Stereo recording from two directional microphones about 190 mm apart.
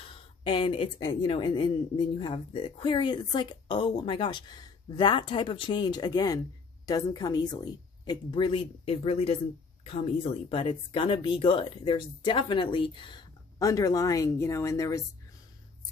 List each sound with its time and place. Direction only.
0.4 s a woman's voice: 25° left (ahead or behind)